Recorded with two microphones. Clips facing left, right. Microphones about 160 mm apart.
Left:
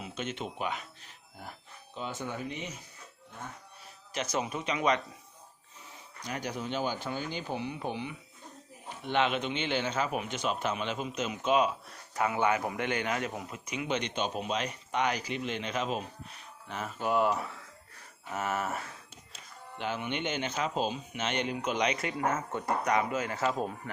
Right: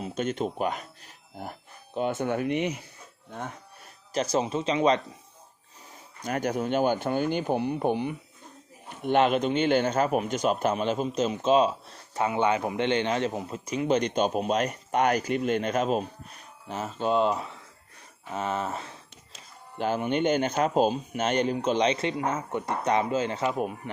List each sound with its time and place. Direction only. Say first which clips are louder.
0.0 s speech: right 8 dB; 40° right (ahead or behind); by 2.8 s 65° right (ahead or behind)
4.1 s speech: right 7 dB; 35° right (ahead or behind)
5.9 s speech: right 8 dB; 50° right (ahead or behind)
16.6 s speech: right 5 dB; 35° right (ahead or behind)
19.8 s speech: right 8 dB; 40° right (ahead or behind); by 23.9 s 15° right (ahead or behind)